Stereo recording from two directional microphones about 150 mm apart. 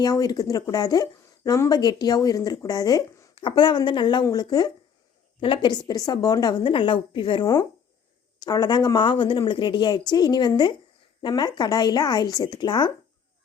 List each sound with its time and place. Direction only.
0.0 s a woman's voice: 25° left (ahead or behind)